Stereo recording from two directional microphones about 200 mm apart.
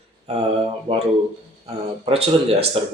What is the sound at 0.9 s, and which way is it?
Speech, 35° right (ahead or behind).